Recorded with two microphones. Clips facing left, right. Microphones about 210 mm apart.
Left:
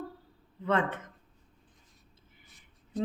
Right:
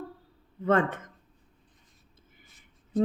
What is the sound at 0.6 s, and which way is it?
Speech, 45° right (ahead or behind).